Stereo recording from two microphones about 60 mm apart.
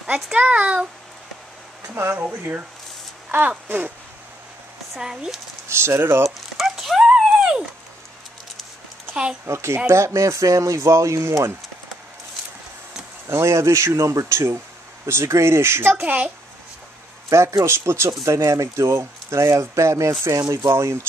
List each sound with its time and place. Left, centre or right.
0.0 s speech: right
2.0 s speech: right
3.3 s speech: right
4.9 s speech: centre
5.7 s speech: right
6.2 s a sound: centre
7.2 s dog: centre
9.1 s speech: centre
9.5 s speech: right
13.3 s speech: right
15.9 s speech: right
17.3 s speech: right